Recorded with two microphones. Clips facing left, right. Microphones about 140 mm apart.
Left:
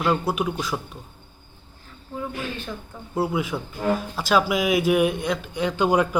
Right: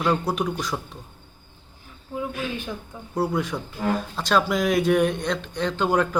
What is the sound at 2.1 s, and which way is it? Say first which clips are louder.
Speech: right 2 dB; 10° right (ahead or behind).